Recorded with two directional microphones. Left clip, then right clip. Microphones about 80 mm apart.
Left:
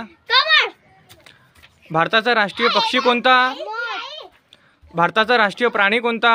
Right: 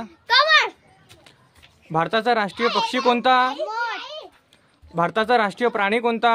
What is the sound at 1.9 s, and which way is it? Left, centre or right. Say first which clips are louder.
Speech: left 4 dB; centre.